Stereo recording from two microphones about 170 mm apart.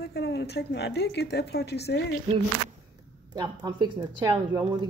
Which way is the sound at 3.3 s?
25° right (ahead or behind).